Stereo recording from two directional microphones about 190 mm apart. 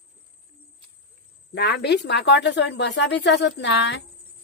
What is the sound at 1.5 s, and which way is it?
Speech, 60° left (ahead or behind).